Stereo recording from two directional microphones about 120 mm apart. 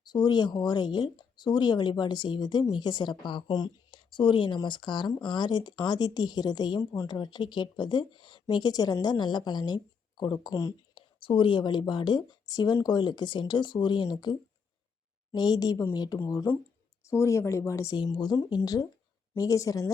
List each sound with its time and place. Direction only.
0.0 s a woman's voice: 35° left (ahead or behind)
7.2 s a woman's voice: 40° left (ahead or behind)
10.9 s a woman's voice: 45° left (ahead or behind); by 17.9 s 25° left (ahead or behind)
17.9 s a woman's voice: 40° left (ahead or behind)